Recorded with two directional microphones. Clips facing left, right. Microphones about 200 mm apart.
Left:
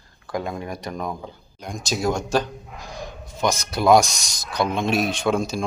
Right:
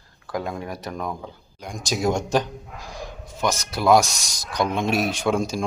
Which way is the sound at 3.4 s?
5° right (ahead or behind).